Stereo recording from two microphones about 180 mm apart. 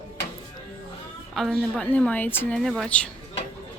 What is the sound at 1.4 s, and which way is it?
A woman's voice, centre (ahead or behind).